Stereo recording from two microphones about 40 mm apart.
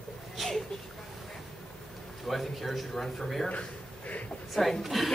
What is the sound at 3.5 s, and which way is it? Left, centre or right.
Speech, left.